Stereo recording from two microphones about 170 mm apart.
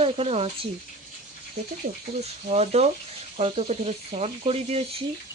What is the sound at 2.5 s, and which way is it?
Speech, 40° right (ahead or behind).